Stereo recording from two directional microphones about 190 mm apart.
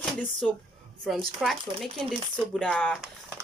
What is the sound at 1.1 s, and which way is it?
Speech, centre (ahead or behind).